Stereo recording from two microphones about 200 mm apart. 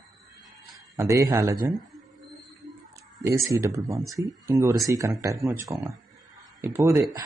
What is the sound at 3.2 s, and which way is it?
A man's voice, 15° right (ahead or behind).